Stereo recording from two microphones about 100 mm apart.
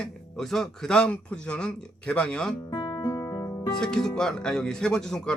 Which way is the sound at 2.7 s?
45° left (ahead or behind).